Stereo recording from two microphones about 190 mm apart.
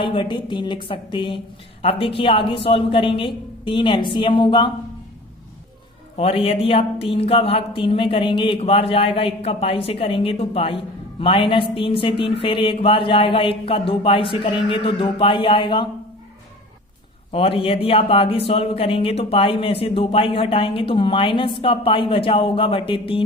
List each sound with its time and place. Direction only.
0.0 s speech: 25° left (ahead or behind)
6.1 s speech: 30° left (ahead or behind)
17.3 s speech: 30° left (ahead or behind)